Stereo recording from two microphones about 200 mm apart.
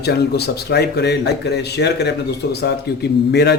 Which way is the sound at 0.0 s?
55° left (ahead or behind).